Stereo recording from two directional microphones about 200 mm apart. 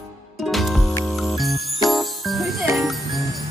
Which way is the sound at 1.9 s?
Centre (ahead or behind).